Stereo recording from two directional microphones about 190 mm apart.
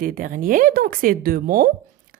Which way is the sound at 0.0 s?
45° right (ahead or behind).